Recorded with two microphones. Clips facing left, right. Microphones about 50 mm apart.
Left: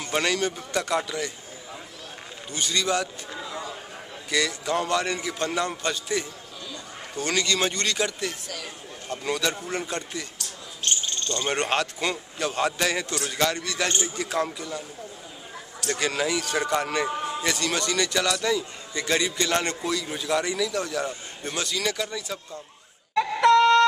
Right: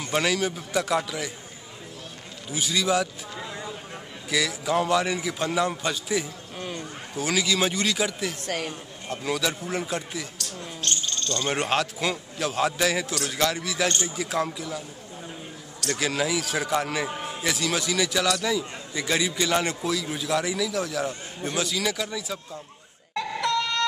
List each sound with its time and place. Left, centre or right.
0.1 s a man's voice: centre
2.5 s a man's voice: centre
8.5 s speech: right
9.1 s a man's voice: centre
10.8 s cricket: centre
11.5 s a man's voice: centre
15.9 s a man's voice: centre
23.1 s a sound: left